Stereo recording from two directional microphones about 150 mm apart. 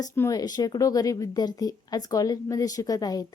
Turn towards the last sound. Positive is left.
turn(degrees=25)  # may be behind; listen again after turning